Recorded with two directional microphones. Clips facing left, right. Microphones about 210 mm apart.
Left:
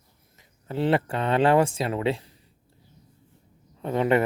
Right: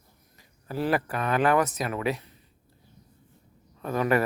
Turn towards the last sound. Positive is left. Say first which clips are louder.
# left 2 dB
turn(degrees=25)  # may be behind; listen again after turning